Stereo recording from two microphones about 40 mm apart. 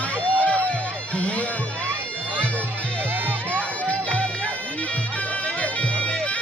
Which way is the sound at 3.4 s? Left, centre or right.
Left.